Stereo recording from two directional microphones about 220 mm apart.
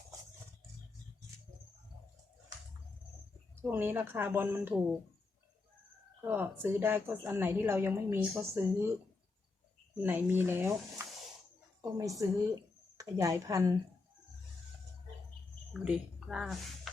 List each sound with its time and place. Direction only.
3.5 s a woman's voice: 10° right (ahead or behind)
6.2 s a woman's voice: 10° right (ahead or behind)
10.0 s a woman's voice: 10° right (ahead or behind)
15.8 s speech: 5° right (ahead or behind)